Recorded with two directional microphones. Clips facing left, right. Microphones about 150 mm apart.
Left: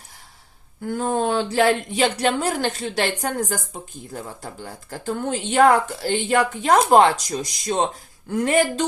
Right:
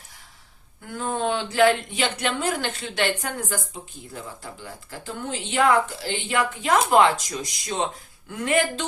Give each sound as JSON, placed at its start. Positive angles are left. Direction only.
{"t": 0.9, "sound": "speech", "side_deg": 40}